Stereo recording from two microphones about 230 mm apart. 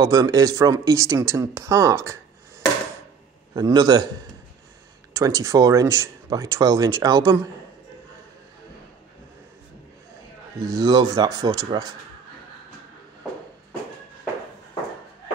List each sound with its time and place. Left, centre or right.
0.0 s speech: centre
3.5 s speech: centre
5.1 s speech: centre
10.6 s speech: centre